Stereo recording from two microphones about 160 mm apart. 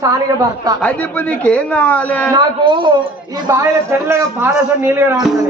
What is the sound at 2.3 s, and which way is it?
A man's voice, 30° right (ahead or behind).